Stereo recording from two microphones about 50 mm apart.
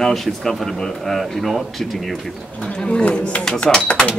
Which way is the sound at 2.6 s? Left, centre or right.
Centre.